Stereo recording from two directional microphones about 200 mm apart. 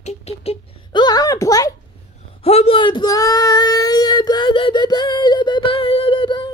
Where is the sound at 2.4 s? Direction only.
30° left (ahead or behind).